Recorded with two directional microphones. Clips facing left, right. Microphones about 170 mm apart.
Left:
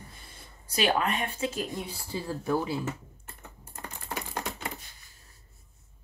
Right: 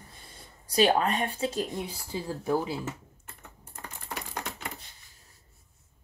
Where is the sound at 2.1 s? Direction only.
20° right (ahead or behind).